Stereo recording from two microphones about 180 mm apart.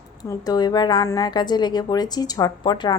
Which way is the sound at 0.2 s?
20° left (ahead or behind).